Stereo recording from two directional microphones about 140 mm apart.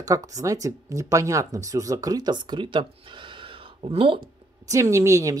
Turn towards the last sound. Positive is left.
turn(degrees=-20)  # may be behind; listen again after turning